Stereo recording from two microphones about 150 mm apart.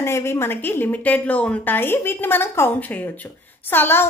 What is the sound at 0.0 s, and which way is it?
A woman's voice, 15° left (ahead or behind).